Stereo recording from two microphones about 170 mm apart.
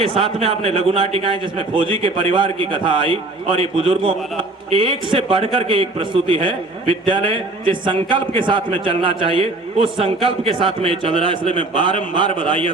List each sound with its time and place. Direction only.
0.0 s a man's voice: 35° right (ahead or behind)